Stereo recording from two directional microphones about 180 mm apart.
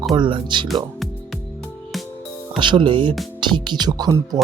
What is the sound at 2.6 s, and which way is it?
Speech, 25° right (ahead or behind).